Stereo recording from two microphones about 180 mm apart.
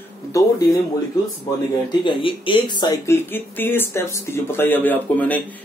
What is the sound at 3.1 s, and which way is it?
Speech, 10° left (ahead or behind).